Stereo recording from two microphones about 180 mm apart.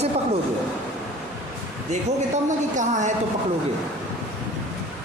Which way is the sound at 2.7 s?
40° right (ahead or behind).